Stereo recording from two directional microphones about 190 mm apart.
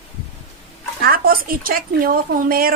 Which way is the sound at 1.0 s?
50° right (ahead or behind).